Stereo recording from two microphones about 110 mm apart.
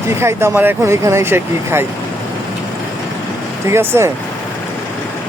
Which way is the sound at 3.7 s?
25° right (ahead or behind).